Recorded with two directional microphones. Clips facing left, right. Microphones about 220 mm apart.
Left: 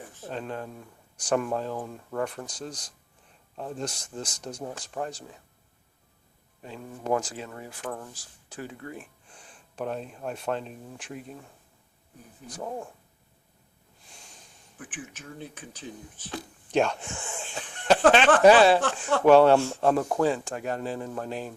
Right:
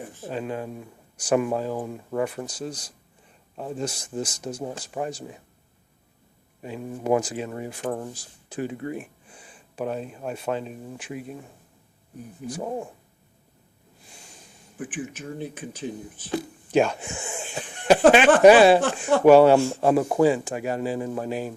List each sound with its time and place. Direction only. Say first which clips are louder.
0.2 s speech: right 4 dB; 5° right (ahead or behind)
6.6 s speech: right 6 dB; 15° right (ahead or behind)
9.3 s speech: right 3 dB; 5° right (ahead or behind)
12.6 s speech: right 3 dB; 20° right (ahead or behind)
14.1 s snort: right 3 dB; 5° right (ahead or behind)
14.8 s speech: right 9 dB; 10° right (ahead or behind)